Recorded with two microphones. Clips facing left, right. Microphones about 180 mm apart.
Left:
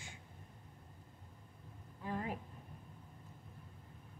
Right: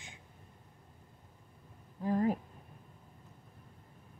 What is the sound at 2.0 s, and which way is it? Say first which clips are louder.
Speech: right 11 dB; 40° right (ahead or behind).